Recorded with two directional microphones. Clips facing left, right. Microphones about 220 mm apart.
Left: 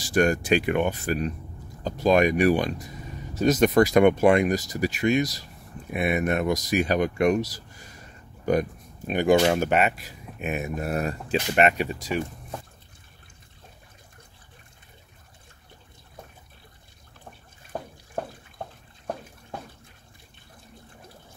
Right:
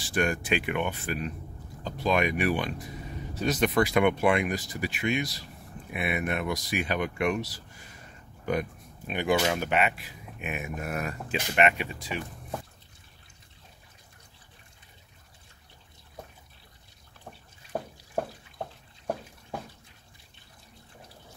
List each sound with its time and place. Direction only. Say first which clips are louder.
0.0 s speech: left 6 dB; 40° left (ahead or behind)